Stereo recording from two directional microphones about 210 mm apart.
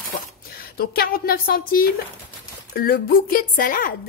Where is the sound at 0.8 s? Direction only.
45° left (ahead or behind).